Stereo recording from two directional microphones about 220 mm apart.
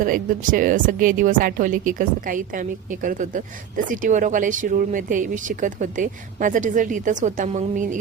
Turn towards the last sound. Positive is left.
turn(degrees=-35)  # may be behind; listen again after turning